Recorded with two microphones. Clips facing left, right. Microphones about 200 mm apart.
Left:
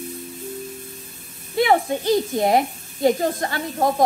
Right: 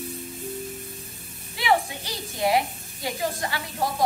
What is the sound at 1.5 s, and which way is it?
A woman's voice, 50° left (ahead or behind).